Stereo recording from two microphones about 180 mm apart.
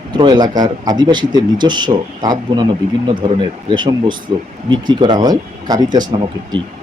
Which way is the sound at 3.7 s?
25° right (ahead or behind).